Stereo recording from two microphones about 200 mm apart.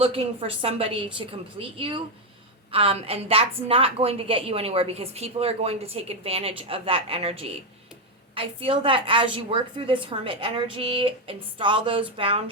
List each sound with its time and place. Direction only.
0.0 s a woman's voice: 30° right (ahead or behind)